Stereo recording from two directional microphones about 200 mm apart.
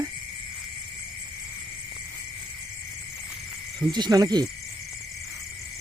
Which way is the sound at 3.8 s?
20° right (ahead or behind).